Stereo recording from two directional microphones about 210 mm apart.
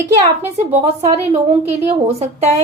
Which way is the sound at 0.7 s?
30° right (ahead or behind).